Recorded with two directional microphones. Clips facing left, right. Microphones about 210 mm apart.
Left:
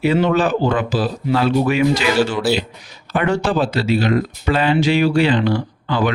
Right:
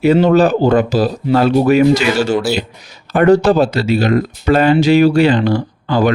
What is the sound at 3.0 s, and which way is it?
Speech, 40° right (ahead or behind).